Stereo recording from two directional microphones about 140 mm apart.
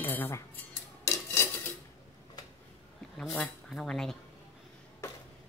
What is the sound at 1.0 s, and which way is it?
Dishes, 20° left (ahead or behind).